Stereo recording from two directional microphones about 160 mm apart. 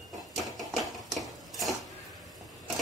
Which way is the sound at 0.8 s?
Centre (ahead or behind).